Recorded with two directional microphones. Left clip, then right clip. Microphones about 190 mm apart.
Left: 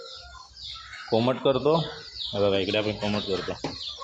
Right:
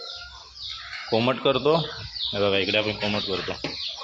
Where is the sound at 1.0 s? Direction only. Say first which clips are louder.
Right 1 dB; centre (ahead or behind).